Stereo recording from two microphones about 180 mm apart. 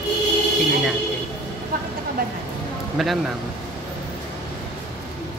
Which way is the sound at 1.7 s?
55° right (ahead or behind).